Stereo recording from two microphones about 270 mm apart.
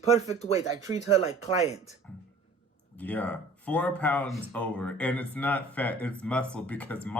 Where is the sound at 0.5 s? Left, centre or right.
Centre.